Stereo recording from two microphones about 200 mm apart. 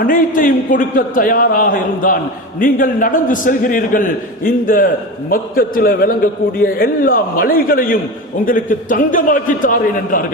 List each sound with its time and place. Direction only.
0.0 s a man's voice: 45° left (ahead or behind)